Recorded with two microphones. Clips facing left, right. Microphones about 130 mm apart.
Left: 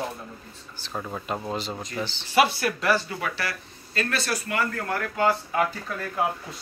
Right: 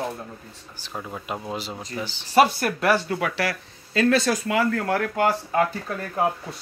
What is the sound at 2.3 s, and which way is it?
Speech, 45° right (ahead or behind).